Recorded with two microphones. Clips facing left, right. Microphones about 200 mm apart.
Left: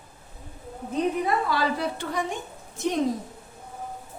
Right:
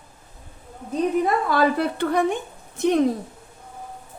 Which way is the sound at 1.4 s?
55° right (ahead or behind).